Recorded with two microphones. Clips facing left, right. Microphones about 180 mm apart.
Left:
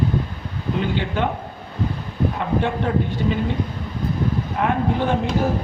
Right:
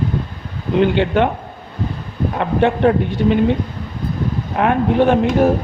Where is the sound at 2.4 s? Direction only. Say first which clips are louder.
Right 10 dB; 75° right (ahead or behind).